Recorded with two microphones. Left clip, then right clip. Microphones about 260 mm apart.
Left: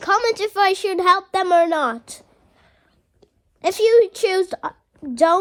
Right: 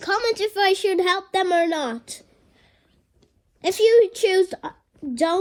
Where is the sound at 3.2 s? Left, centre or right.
Centre.